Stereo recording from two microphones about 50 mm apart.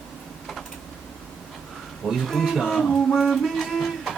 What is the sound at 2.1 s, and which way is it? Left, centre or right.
Music, centre.